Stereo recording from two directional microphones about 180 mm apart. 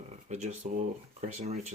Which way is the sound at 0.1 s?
40° right (ahead or behind).